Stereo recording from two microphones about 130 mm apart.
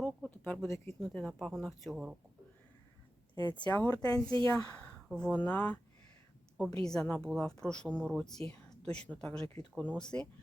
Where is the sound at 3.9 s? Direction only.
30° left (ahead or behind); by 10.2 s 5° left (ahead or behind).